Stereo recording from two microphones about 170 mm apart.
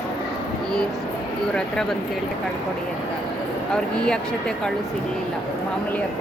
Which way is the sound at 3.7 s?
5° left (ahead or behind).